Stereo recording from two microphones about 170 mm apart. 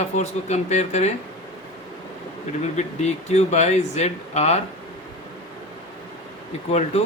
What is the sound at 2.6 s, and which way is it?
A man's voice, 40° left (ahead or behind).